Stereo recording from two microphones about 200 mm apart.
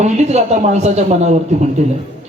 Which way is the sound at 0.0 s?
35° right (ahead or behind).